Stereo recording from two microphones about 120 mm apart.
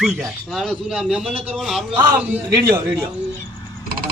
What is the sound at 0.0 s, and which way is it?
Speech, centre (ahead or behind).